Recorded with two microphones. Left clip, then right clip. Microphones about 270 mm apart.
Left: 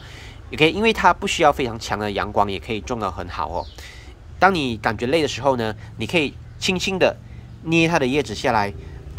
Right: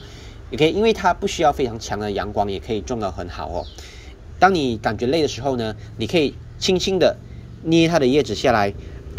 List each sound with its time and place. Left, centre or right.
0.5 s speech: centre